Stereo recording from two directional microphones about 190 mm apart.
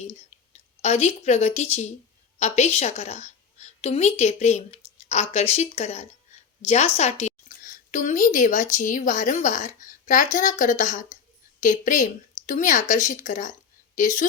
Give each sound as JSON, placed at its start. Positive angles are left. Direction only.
{"t": 0.5, "sound": "a woman's voice", "side_deg": 35}